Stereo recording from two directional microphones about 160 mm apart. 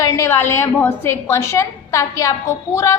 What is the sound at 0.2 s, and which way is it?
A woman's voice, 15° left (ahead or behind).